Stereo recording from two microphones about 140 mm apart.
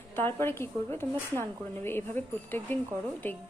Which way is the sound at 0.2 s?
15° left (ahead or behind).